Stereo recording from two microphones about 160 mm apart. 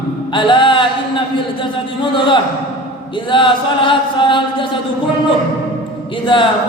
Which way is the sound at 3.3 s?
30° left (ahead or behind).